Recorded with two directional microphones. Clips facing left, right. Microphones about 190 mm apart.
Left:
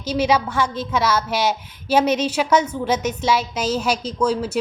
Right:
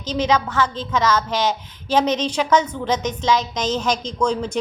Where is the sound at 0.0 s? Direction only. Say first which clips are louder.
Left 1 dB; 10° left (ahead or behind).